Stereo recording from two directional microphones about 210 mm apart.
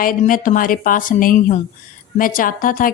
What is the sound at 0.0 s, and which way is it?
A woman's voice, 40° left (ahead or behind).